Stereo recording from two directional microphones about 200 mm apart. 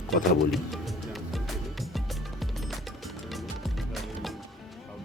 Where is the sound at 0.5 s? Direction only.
Centre (ahead or behind).